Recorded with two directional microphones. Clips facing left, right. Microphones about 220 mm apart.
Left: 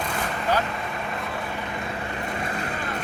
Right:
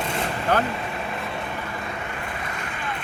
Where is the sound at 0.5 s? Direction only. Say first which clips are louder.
Right 3 dB; 55° right (ahead or behind).